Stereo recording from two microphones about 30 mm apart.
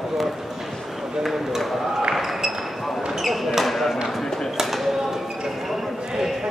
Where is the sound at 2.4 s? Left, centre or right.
Centre.